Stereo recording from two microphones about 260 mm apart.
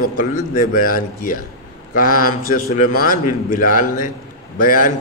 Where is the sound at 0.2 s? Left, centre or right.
Left.